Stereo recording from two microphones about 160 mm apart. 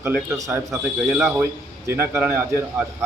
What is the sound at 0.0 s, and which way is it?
Speech, 15° right (ahead or behind).